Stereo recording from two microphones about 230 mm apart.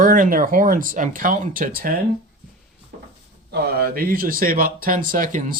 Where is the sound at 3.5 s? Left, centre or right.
Right.